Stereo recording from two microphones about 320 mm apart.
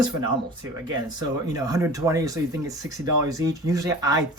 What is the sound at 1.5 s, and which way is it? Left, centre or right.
Speech, centre.